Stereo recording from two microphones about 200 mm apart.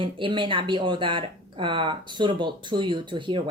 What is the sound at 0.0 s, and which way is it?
Speech, 25° right (ahead or behind).